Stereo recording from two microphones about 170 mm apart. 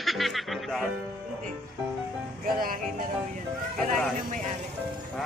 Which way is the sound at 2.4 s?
55° right (ahead or behind).